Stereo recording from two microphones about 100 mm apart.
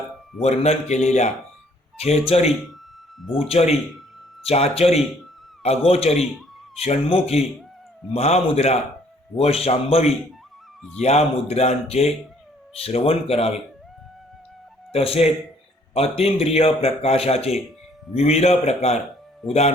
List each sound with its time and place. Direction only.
0.4 s speech: 90° left
2.0 s speech: 90° left
3.2 s speech: centre (ahead or behind)
3.5 s a man's voice: 90° left
14.9 s a man's voice: 85° left